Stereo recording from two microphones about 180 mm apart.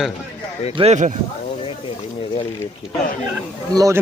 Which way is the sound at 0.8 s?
40° right (ahead or behind).